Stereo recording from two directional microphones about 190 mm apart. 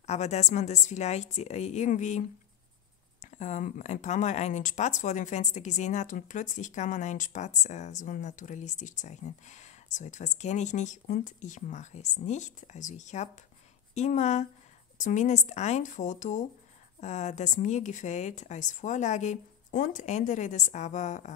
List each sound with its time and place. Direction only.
0.0 s speech: 35° left (ahead or behind)
3.3 s speech: 40° left (ahead or behind)